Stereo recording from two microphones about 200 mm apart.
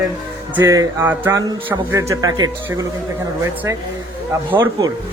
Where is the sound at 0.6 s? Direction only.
15° right (ahead or behind).